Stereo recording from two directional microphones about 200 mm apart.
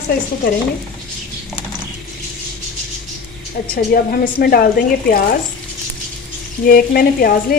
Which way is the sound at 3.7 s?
50° left (ahead or behind).